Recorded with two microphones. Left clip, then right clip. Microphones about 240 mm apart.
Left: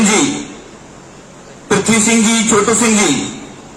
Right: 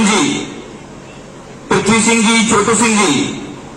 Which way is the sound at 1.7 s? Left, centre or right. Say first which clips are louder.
Right 1 dB; left.